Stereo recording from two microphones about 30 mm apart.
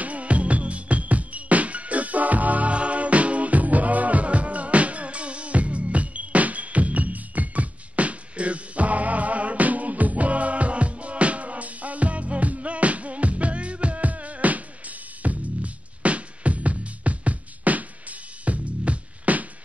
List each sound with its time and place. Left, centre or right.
0.0 s music: right
2.7 s music: right